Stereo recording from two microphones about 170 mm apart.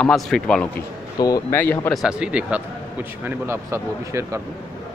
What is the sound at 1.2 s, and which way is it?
Speech, 20° left (ahead or behind).